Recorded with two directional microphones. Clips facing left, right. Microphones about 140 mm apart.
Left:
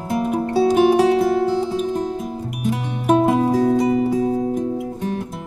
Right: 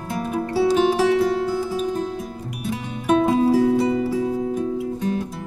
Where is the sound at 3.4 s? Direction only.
15° left (ahead or behind).